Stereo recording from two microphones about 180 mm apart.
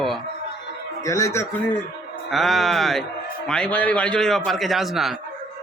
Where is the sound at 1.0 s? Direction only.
15° left (ahead or behind).